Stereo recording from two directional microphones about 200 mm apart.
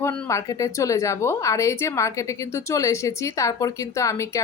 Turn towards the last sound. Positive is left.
turn(degrees=15)  # may be behind; listen again after turning